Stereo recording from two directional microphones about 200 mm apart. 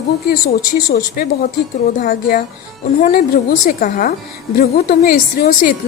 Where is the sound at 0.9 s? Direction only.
50° left (ahead or behind).